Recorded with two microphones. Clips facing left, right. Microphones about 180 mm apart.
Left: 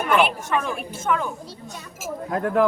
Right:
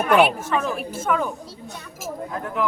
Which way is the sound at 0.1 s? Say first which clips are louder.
Right 3 dB; centre (ahead or behind).